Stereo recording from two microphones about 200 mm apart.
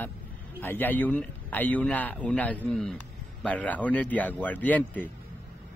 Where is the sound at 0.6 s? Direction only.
10° left (ahead or behind).